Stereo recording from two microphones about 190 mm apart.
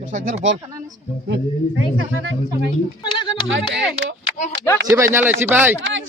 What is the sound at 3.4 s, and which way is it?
Speech, 85° right.